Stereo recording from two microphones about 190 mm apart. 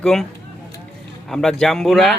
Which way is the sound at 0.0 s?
Centre (ahead or behind).